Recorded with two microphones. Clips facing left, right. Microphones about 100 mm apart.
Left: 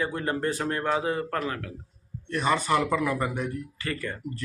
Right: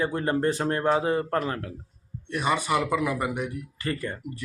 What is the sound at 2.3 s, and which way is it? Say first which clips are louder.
A man's voice: left 1 dB; 15° right (ahead or behind).